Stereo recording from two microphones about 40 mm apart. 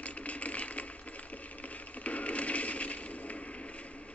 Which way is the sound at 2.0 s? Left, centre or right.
Left.